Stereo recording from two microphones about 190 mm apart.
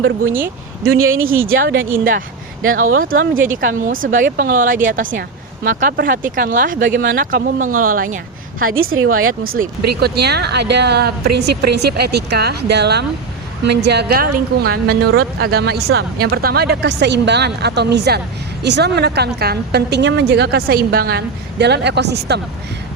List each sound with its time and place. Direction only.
0.3 s speech: 10° right (ahead or behind)
0.9 s a woman's voice: 90° right
1.5 s speech: 50° right (ahead or behind)
8.6 s a woman's voice: 90° right
9.4 s speech: 50° right (ahead or behind)